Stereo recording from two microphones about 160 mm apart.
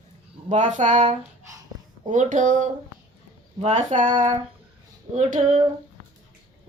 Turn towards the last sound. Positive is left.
turn(degrees=-50)  # may be behind; listen again after turning